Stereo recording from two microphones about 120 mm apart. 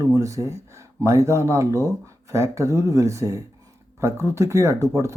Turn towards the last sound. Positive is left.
turn(degrees=-25)  # may be behind; listen again after turning